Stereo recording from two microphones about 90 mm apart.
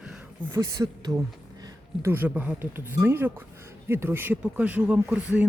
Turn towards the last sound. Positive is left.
turn(degrees=-15)  # may be behind; listen again after turning